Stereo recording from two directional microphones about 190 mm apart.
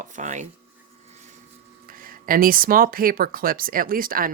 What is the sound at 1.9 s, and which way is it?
Speech, 50° right (ahead or behind).